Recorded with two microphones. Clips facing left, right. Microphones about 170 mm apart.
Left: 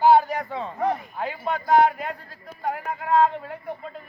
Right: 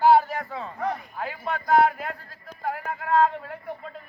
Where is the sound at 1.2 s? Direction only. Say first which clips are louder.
Left 3 dB; centre (ahead or behind).